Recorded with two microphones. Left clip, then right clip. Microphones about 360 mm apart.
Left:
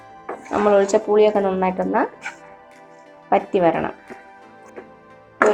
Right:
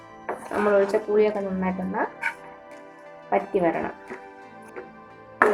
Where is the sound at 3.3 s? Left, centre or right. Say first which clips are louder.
Left 6 dB; left.